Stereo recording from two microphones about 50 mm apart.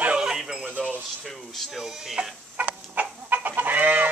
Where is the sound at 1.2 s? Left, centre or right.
Centre.